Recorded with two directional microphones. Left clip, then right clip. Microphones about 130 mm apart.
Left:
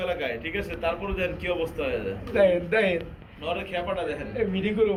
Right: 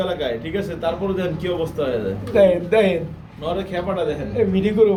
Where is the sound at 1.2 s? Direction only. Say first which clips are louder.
Right 4 dB; 50° right (ahead or behind).